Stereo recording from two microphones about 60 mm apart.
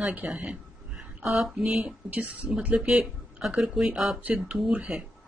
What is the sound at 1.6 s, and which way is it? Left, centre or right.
Speech, centre.